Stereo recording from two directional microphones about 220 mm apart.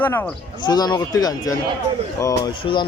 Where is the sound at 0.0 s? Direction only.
10° left (ahead or behind).